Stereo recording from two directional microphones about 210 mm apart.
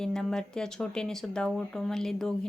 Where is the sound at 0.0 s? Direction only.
Centre (ahead or behind).